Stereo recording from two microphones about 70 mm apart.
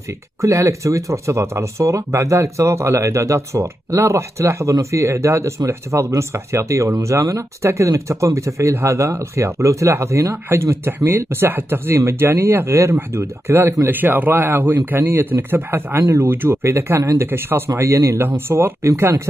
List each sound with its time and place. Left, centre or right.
0.4 s speech: right